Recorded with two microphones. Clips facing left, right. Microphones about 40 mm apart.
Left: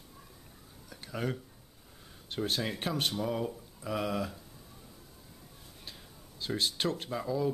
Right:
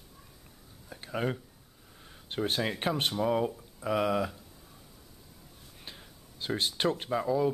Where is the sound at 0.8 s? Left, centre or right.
Right.